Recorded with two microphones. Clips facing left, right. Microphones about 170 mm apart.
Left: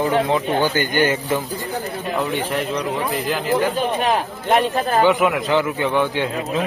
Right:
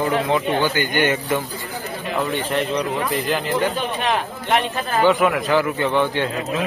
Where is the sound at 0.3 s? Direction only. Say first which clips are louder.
Left 1 dB; 40° left (ahead or behind).